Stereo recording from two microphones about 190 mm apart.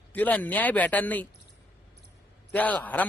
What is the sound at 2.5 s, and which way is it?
Speech, 5° left (ahead or behind).